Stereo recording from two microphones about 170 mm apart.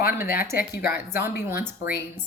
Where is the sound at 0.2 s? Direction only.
60° left (ahead or behind).